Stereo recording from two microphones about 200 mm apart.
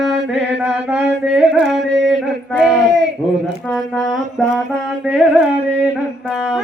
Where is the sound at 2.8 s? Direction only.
60° right (ahead or behind).